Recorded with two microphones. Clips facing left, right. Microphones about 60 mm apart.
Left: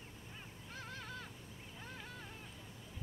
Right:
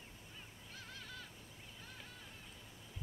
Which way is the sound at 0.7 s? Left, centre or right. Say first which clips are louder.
Left 5 dB; left.